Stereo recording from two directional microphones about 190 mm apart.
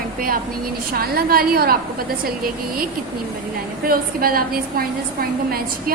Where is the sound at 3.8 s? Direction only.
50° right (ahead or behind).